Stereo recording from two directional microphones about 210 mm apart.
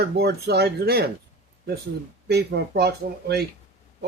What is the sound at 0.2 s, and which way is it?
Speech, 50° right (ahead or behind).